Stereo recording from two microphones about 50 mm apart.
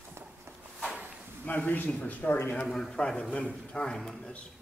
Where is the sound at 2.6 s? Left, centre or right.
Centre.